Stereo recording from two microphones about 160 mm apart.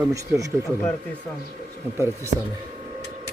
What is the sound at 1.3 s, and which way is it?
Speech, 5° left (ahead or behind).